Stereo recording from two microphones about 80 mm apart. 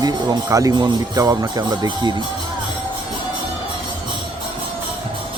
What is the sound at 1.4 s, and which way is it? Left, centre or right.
Speech, right.